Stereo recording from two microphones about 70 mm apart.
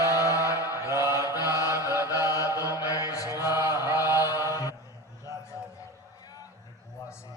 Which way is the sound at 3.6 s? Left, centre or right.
Right.